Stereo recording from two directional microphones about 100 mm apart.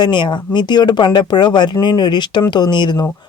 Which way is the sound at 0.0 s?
50° left (ahead or behind).